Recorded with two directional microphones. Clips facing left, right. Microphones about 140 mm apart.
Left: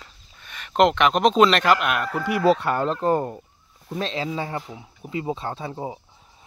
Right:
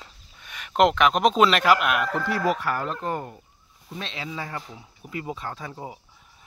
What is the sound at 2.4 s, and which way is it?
Speech, 25° left (ahead or behind).